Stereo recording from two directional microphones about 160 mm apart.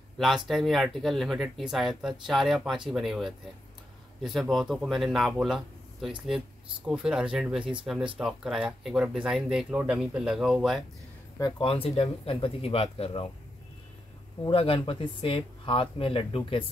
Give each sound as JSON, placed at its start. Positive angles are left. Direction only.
{"t": 0.2, "sound": "speech", "side_deg": 0}
{"t": 11.3, "sound": "speech", "side_deg": 30}
{"t": 14.4, "sound": "speech", "side_deg": 35}